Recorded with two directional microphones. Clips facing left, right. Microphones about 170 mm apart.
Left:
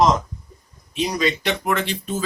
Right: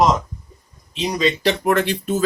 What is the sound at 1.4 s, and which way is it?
Speech, 40° right (ahead or behind).